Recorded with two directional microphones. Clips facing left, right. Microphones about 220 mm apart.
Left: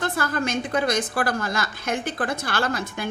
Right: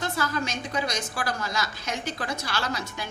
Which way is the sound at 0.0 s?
55° left (ahead or behind).